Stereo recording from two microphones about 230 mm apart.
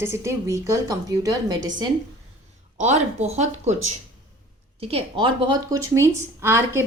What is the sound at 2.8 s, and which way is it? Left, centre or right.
Speech, right.